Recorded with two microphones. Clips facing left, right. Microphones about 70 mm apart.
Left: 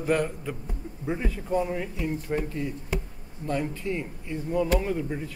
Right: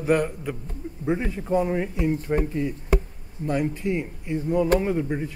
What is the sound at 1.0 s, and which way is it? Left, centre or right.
Speech, centre.